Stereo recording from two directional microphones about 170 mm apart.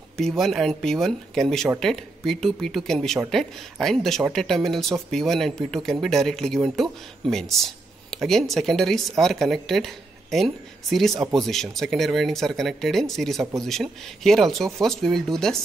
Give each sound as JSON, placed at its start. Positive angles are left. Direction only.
{"t": 0.2, "sound": "speech", "side_deg": 0}